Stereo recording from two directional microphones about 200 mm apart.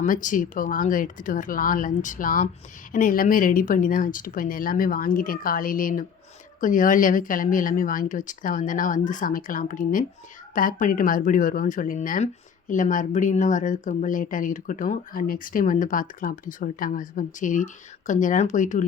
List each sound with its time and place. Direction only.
0.0 s speech: 40° left (ahead or behind)